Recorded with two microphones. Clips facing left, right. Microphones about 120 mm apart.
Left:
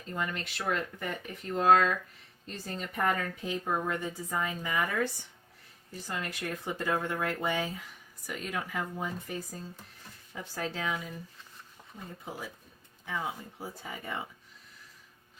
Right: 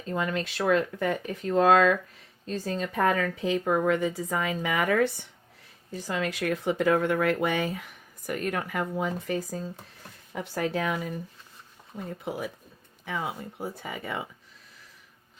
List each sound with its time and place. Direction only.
0.1 s a woman's voice: 90° right; by 5.2 s 70° right (ahead or behind)
6.0 s speech: 90° right
10.3 s speech: 65° right (ahead or behind)
12.2 s speech: 65° right (ahead or behind); by 14.2 s 85° right